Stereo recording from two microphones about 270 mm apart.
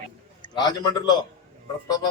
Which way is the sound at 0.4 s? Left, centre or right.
Centre.